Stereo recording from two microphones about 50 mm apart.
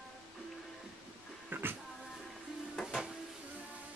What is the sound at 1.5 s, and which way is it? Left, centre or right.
Music, right.